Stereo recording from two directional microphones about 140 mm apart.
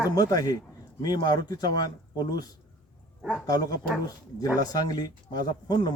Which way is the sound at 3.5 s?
30° left (ahead or behind).